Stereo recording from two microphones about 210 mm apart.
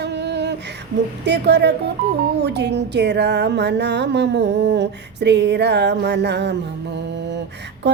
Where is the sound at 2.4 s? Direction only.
50° right (ahead or behind).